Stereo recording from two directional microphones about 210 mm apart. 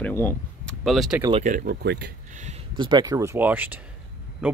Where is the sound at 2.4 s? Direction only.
25° right (ahead or behind).